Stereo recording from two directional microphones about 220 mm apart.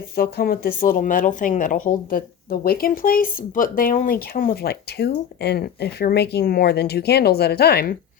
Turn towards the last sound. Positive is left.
turn(degrees=45)  # may be behind; listen again after turning